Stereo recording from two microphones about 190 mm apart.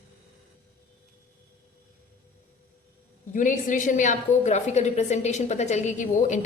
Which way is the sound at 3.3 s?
40° left (ahead or behind).